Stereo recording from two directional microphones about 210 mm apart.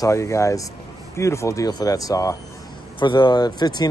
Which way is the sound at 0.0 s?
15° left (ahead or behind).